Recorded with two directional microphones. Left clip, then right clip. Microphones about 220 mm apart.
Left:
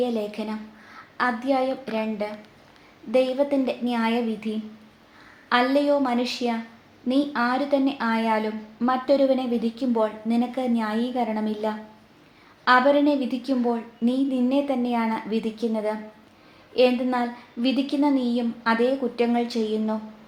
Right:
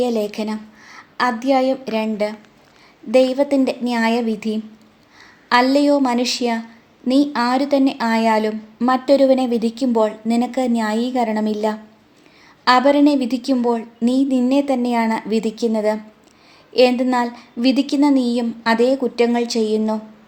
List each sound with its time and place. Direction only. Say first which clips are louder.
0.0 s speech: right 6 dB; 50° right (ahead or behind)